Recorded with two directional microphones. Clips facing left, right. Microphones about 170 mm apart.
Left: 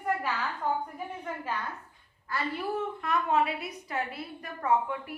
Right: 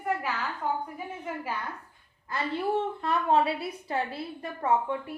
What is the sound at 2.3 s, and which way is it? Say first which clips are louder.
A woman's voice: right 3 dB; 25° right (ahead or behind).